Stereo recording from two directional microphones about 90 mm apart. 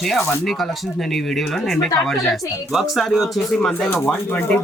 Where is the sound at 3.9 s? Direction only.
25° left (ahead or behind).